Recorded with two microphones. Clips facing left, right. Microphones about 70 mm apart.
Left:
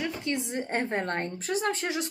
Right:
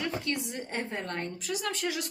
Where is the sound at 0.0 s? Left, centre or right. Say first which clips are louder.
Left 1 dB; left.